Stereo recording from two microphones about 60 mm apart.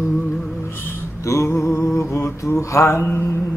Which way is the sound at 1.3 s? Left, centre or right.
Left.